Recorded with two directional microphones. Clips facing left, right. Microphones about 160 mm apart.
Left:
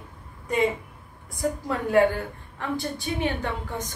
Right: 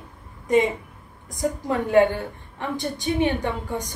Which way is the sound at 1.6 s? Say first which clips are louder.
Right 3 dB; 20° right (ahead or behind).